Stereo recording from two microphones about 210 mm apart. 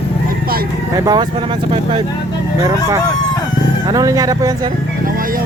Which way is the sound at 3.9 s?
15° right (ahead or behind).